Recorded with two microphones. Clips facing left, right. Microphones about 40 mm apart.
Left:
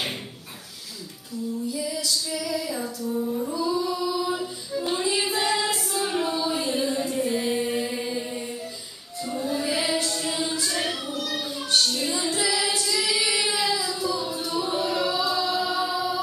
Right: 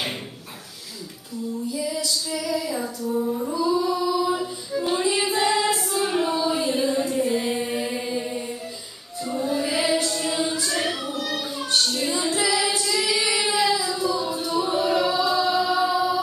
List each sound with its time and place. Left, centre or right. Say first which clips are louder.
1.7 s female singing: right 2 dB; centre
3.2 s music: right 2 dB; centre
3.5 s female singing: right 5 dB; centre
9.2 s music: right 3 dB; centre